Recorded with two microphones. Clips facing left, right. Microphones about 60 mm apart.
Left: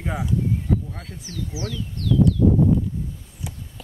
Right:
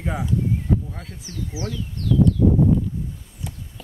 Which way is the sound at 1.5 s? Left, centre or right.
Right.